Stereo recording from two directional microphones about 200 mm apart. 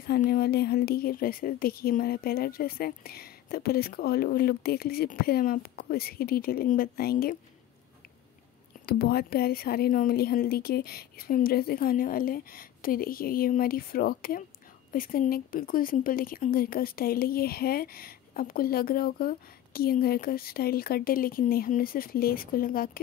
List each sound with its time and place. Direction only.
0.3 s speech: 50° left (ahead or behind)
8.8 s speech: 50° left (ahead or behind)